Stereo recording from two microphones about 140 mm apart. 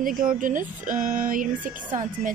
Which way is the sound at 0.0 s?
75° right (ahead or behind).